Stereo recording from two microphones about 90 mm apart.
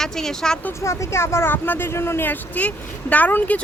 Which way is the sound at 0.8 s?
35° left (ahead or behind).